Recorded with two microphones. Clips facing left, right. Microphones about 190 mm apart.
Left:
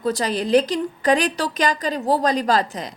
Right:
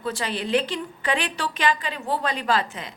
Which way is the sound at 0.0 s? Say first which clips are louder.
Left 6 dB; 40° left (ahead or behind).